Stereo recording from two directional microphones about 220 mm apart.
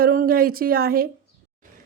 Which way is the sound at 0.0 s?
40° right (ahead or behind).